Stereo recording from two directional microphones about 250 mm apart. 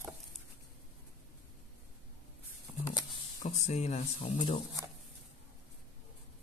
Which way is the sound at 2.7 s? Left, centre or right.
Centre.